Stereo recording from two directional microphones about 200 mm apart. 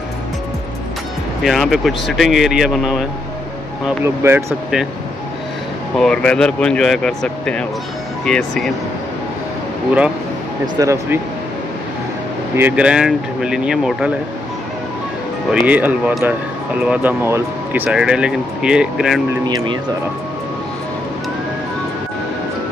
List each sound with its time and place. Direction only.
1.4 s speech: centre (ahead or behind)
3.8 s speech: 10° right (ahead or behind)
5.9 s speech: 5° left (ahead or behind)
10.8 s speech: 15° right (ahead or behind)
12.5 s speech: 10° right (ahead or behind)
15.6 s speech: 5° right (ahead or behind)
19.4 s speech: 20° right (ahead or behind)